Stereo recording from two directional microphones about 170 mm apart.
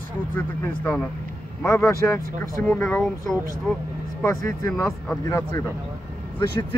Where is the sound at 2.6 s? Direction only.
10° left (ahead or behind).